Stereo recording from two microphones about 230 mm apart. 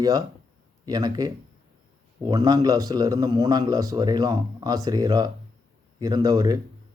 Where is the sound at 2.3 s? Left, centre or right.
Centre.